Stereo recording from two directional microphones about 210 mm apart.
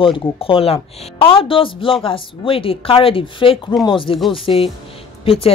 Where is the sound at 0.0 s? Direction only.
25° left (ahead or behind).